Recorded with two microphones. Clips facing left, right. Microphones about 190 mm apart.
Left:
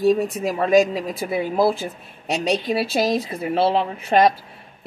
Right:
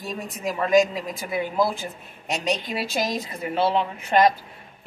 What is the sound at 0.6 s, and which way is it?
Speech, 35° left (ahead or behind).